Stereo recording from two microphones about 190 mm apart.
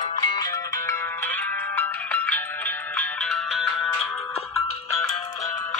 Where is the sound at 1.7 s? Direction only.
10° left (ahead or behind).